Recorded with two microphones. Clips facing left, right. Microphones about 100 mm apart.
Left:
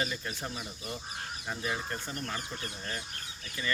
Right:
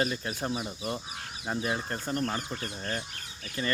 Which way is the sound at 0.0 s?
40° right (ahead or behind).